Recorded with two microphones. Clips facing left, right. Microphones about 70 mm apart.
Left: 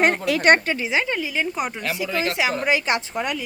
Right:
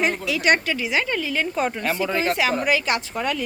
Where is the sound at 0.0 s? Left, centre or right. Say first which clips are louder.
Left 3 dB; left.